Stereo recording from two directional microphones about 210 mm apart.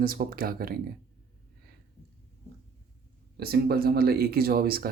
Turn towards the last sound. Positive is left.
turn(degrees=-45)  # may be behind; listen again after turning